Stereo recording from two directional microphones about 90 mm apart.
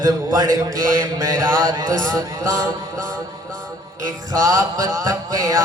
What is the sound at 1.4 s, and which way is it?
Mantra, 35° right (ahead or behind).